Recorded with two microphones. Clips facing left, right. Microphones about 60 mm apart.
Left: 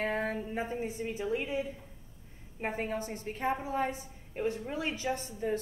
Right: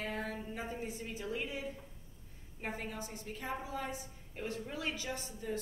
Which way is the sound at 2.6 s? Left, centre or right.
Left.